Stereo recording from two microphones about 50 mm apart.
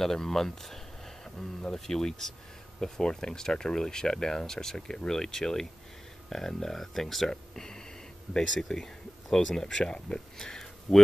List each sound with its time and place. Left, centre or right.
0.0 s speech: centre